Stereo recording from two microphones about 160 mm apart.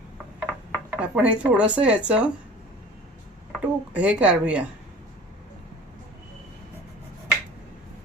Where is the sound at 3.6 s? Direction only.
10° right (ahead or behind).